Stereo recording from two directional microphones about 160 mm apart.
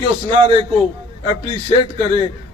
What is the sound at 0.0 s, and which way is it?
A man's voice, 30° right (ahead or behind).